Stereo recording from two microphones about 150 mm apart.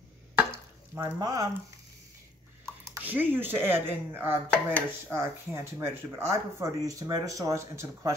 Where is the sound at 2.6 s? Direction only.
10° right (ahead or behind).